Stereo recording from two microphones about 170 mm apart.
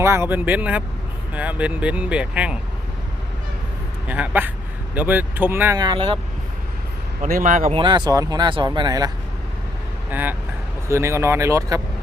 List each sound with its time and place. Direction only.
0.0 s speech: 15° right (ahead or behind)
4.0 s speech: 10° right (ahead or behind)
5.8 s speech: 25° right (ahead or behind)
7.2 s a man's voice: 55° right (ahead or behind)
7.7 s speech: 30° right (ahead or behind)
10.1 s speech: 10° right (ahead or behind)